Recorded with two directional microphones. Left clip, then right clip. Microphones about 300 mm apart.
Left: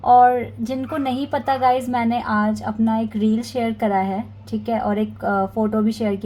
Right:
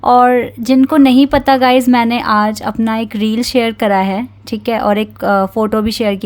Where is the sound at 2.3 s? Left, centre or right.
Right.